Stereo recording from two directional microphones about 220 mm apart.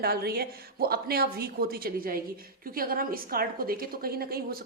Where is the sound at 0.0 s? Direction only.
45° right (ahead or behind).